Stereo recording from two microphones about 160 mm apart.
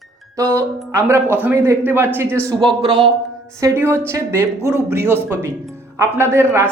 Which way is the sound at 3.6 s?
15° right (ahead or behind).